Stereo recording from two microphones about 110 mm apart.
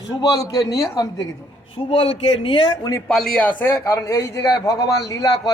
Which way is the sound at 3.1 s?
5° left (ahead or behind).